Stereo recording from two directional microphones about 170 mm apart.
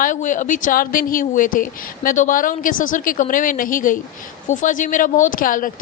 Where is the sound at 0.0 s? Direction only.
50° left (ahead or behind).